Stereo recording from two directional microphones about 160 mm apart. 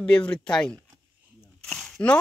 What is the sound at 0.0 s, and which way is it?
Speech, 5° left (ahead or behind).